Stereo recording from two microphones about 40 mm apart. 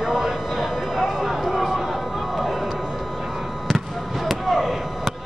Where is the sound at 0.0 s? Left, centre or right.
Centre.